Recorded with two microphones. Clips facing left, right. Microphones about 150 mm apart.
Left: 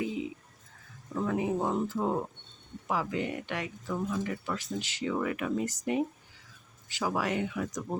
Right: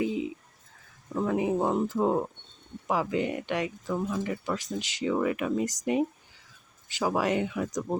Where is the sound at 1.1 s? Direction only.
20° right (ahead or behind).